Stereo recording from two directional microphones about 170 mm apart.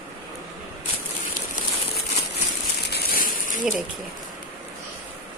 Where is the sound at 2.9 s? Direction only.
65° left (ahead or behind).